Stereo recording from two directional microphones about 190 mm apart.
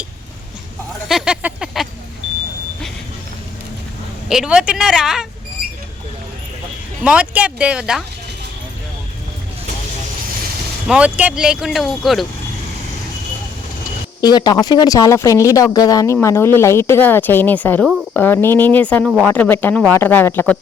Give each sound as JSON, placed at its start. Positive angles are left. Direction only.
{"t": 1.0, "sound": "a sound", "side_deg": -5}
{"t": 4.3, "sound": "speech", "side_deg": -5}
{"t": 7.0, "sound": "speech", "side_deg": -5}
{"t": 10.8, "sound": "speech", "side_deg": -5}
{"t": 14.2, "sound": "speech", "side_deg": 20}